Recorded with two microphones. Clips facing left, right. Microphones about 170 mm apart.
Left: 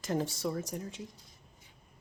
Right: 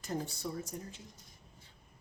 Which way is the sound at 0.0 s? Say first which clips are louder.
Left 6 dB; 90° left.